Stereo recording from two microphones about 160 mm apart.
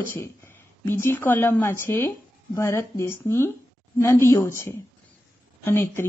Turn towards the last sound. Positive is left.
turn(degrees=15)  # may be behind; listen again after turning